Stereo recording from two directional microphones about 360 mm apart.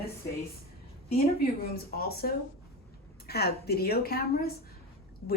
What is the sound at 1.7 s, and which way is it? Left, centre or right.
A woman's voice, left.